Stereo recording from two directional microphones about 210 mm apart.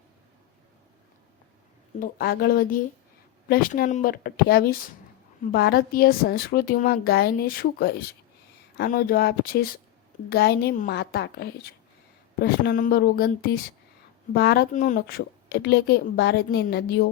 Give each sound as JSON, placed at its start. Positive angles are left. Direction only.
{"t": 2.0, "sound": "a woman's voice", "side_deg": 45}
{"t": 14.7, "sound": "a woman's voice", "side_deg": 35}